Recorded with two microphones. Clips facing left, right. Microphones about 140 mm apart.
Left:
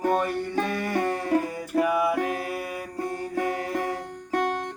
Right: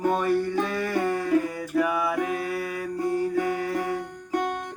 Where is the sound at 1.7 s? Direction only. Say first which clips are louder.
Left 2 dB; 35° left (ahead or behind).